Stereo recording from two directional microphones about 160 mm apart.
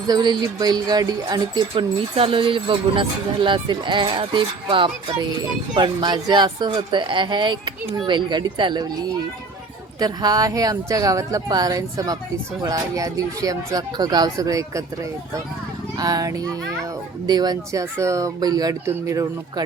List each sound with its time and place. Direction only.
0.1 s speech: 25° right (ahead or behind)
10.0 s speech: 25° right (ahead or behind)
16.0 s speech: 25° right (ahead or behind)